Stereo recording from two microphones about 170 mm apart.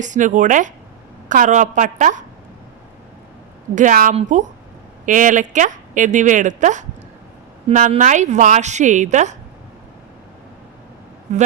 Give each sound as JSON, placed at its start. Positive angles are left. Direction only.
{"t": 0.0, "sound": "a woman's voice", "side_deg": -45}
{"t": 3.8, "sound": "a woman's voice", "side_deg": -50}
{"t": 11.3, "sound": "speech", "side_deg": -40}